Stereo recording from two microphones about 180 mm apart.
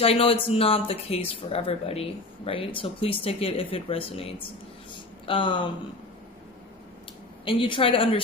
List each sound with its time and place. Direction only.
0.0 s speech: 35° left (ahead or behind)
4.9 s a sound: 30° left (ahead or behind)
7.4 s a woman's voice: 30° left (ahead or behind)